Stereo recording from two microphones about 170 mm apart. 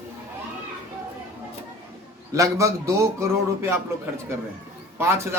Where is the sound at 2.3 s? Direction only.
20° right (ahead or behind).